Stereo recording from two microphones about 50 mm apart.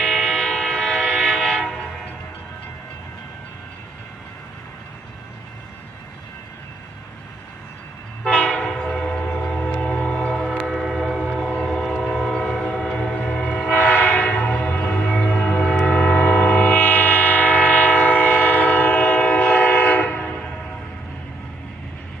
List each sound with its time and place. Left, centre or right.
0.0 s train: centre
8.3 s train: left
8.6 s train: centre
10.7 s train: centre
13.1 s train: left
13.7 s train: left